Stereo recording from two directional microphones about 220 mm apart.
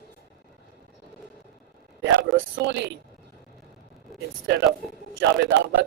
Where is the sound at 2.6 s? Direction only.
50° right (ahead or behind).